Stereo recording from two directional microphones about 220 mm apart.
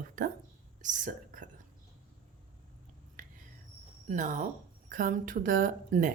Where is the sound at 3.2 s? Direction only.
40° right (ahead or behind).